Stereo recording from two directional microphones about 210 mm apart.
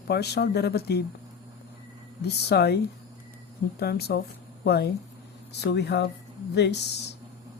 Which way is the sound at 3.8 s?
50° left (ahead or behind).